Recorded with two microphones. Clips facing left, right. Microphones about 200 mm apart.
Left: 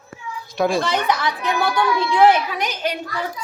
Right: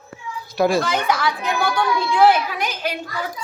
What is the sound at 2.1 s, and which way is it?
Speech, 5° right (ahead or behind).